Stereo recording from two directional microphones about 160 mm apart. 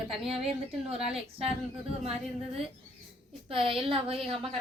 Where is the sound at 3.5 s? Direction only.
35° right (ahead or behind).